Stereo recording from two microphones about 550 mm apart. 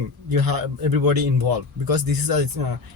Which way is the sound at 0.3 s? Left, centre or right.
Right.